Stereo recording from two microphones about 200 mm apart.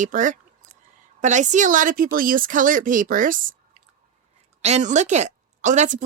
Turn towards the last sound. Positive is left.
turn(degrees=-35)  # may be behind; listen again after turning